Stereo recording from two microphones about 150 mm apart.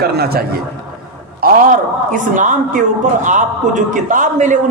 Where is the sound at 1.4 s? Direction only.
75° right (ahead or behind).